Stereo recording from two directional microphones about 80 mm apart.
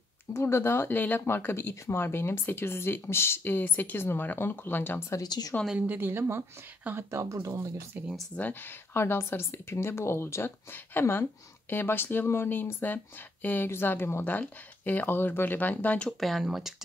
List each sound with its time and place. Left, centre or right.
0.3 s speech: left
5.1 s speech: left
5.8 s a woman's voice: right
8.4 s speech: left
16.1 s speech: centre